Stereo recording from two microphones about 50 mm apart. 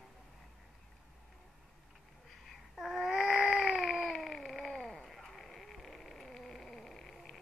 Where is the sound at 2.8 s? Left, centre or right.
Centre.